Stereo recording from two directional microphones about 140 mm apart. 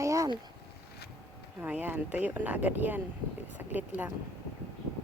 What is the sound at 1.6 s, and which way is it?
Speech, 10° right (ahead or behind).